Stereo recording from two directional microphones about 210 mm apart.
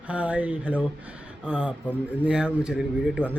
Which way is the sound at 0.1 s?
5° right (ahead or behind).